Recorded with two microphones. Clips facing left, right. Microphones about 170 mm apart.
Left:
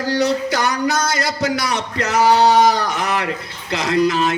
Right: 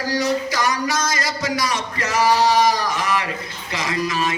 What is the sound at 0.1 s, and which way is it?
A man's voice, 60° left (ahead or behind).